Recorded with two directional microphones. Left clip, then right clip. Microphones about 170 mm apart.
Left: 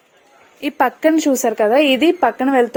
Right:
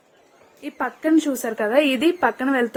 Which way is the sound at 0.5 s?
60° left (ahead or behind).